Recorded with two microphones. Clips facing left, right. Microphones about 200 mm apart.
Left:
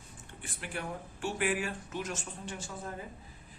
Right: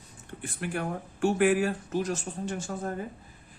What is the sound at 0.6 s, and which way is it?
Speech, 50° right (ahead or behind).